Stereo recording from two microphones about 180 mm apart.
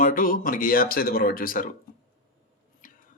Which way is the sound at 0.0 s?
50° left (ahead or behind).